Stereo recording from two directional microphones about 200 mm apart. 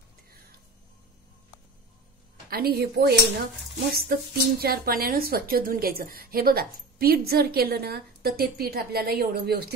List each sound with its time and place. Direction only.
2.5 s a woman's voice: 50° right (ahead or behind)